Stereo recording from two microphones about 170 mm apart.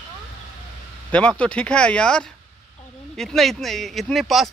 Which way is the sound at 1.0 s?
5° left (ahead or behind).